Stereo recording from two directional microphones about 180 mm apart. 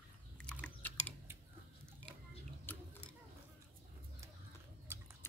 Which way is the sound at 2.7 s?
10° left (ahead or behind).